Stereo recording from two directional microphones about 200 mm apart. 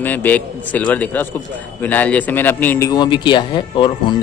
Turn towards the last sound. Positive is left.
turn(degrees=20)  # may be behind; listen again after turning